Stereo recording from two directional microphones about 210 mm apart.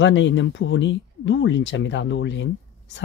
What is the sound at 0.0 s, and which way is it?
Speech, 60° left (ahead or behind).